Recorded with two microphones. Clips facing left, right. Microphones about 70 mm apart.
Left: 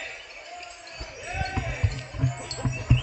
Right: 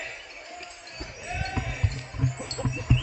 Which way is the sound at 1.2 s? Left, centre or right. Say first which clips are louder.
Left 1 dB; centre.